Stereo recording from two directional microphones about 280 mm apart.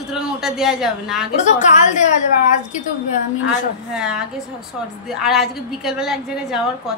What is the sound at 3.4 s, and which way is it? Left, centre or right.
A woman's voice, centre.